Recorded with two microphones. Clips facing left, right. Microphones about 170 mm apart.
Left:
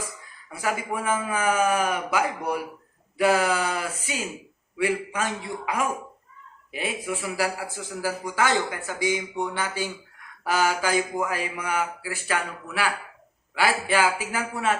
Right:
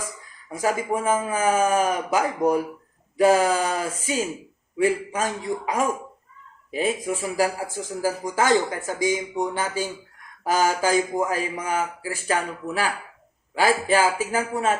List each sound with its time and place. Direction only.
0.5 s a man's voice: 40° right (ahead or behind)
13.7 s speech: 40° right (ahead or behind)